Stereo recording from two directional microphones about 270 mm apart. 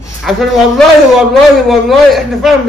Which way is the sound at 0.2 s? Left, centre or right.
Centre.